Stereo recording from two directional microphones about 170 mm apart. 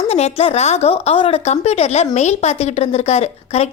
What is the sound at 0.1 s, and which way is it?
A woman's voice, 35° left (ahead or behind).